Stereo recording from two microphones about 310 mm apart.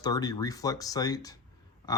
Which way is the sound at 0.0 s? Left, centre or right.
Centre.